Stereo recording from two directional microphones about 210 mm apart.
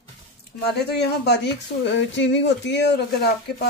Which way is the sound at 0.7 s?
50° left (ahead or behind).